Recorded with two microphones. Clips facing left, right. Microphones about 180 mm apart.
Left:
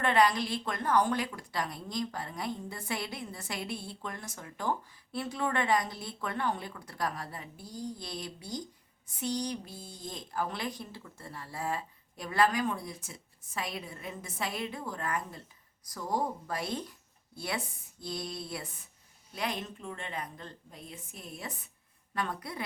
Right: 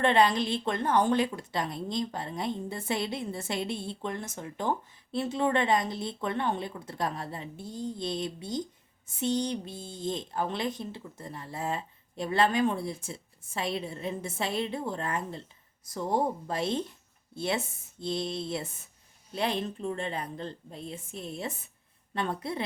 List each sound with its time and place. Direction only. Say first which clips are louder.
0.0 s a woman's voice: right 3 dB; 25° right (ahead or behind)